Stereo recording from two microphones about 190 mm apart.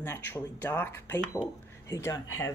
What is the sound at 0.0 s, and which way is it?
Speech, 10° left (ahead or behind).